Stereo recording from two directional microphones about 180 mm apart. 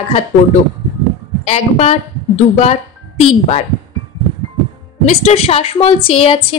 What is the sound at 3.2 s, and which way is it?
Speech, 30° left (ahead or behind).